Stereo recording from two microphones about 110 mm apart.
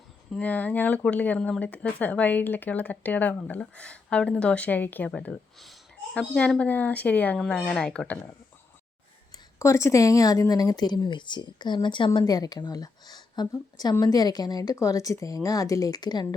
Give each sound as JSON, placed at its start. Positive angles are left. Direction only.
{"t": 0.3, "sound": "speech", "side_deg": 10}
{"t": 9.3, "sound": "speech", "side_deg": 25}
{"t": 12.2, "sound": "a woman's voice", "side_deg": 35}